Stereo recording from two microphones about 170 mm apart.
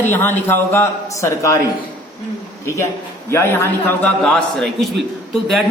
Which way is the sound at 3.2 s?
15° left (ahead or behind).